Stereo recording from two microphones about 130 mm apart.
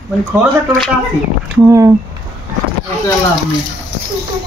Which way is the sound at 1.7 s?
25° right (ahead or behind).